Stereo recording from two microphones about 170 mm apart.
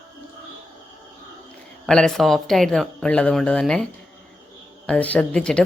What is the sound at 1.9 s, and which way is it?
Speech, 5° left (ahead or behind).